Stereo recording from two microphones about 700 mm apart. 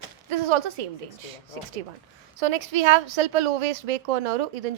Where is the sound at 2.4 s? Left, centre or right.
Right.